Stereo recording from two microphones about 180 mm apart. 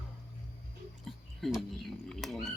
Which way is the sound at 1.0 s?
Centre (ahead or behind).